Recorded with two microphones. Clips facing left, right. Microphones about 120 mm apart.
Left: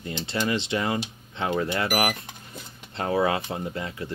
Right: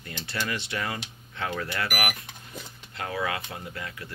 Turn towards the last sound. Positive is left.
turn(degrees=25)  # may be behind; listen again after turning